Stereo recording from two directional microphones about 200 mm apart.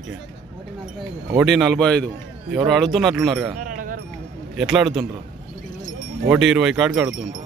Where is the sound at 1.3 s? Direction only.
Centre (ahead or behind).